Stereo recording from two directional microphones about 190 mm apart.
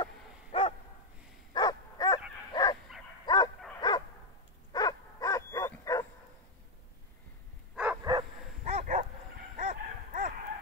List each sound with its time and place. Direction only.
0.0 s dog: 30° left (ahead or behind)
4.7 s bow-wow: 20° left (ahead or behind)
7.7 s bow-wow: 5° right (ahead or behind)
8.0 s bow-wow: 20° right (ahead or behind)
8.6 s bow-wow: 40° right (ahead or behind)
9.6 s dog: 40° right (ahead or behind)